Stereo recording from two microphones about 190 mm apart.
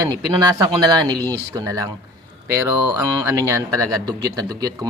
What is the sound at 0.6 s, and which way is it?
Mantra, 20° right (ahead or behind).